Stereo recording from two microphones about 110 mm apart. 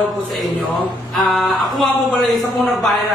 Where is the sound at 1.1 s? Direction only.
Centre (ahead or behind).